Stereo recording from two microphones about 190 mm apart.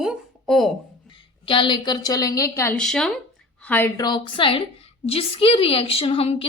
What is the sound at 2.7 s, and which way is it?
A woman's voice, 5° left (ahead or behind).